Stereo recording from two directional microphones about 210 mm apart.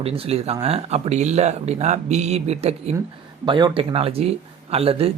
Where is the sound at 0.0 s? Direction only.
30° right (ahead or behind).